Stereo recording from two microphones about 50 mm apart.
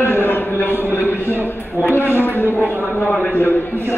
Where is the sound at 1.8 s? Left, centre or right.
Left.